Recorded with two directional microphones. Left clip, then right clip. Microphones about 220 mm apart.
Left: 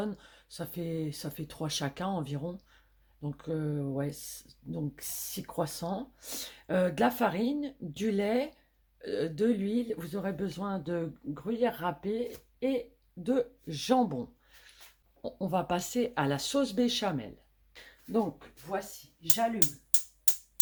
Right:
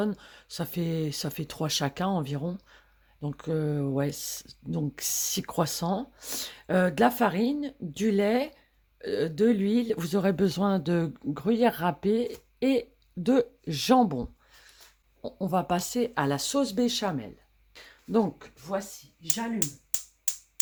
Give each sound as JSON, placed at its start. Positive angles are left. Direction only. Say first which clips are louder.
{"t": 0.0, "sound": "speech", "louder": "right 6 dB", "side_deg": -35}
{"t": 13.2, "sound": "speech", "louder": "right 5 dB", "side_deg": -40}
{"t": 17.7, "sound": "a sound", "louder": "right 3 dB", "side_deg": -25}